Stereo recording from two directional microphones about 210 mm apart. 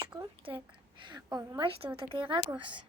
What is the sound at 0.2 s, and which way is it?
A woman's voice, 25° right (ahead or behind).